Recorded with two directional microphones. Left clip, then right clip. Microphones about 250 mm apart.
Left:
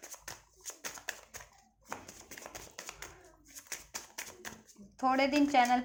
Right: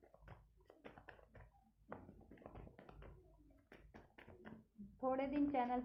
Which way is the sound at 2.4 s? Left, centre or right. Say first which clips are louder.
Left 12 dB; centre.